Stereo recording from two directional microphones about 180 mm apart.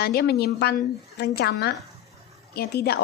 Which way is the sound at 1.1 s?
65° left (ahead or behind).